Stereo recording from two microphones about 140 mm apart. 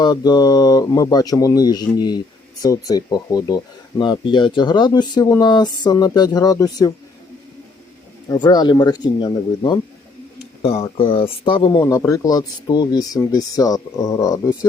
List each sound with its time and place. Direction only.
0.0 s speech: 30° left (ahead or behind)
8.3 s speech: 30° left (ahead or behind)
10.3 s speech: 45° left (ahead or behind)
11.8 s speech: 25° left (ahead or behind)